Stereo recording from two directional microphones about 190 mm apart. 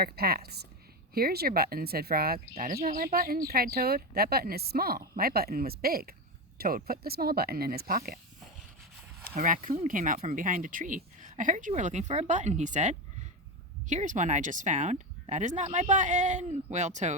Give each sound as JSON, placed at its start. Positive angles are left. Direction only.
{"t": 0.0, "sound": "a woman's voice", "side_deg": -55}
{"t": 9.2, "sound": "speech", "side_deg": -45}